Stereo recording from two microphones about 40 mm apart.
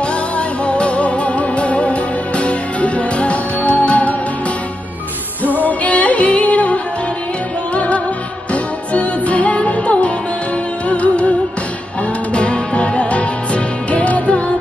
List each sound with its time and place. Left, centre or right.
0.0 s music: left
5.6 s music: left